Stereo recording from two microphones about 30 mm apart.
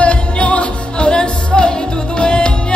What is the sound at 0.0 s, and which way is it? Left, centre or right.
Music, left.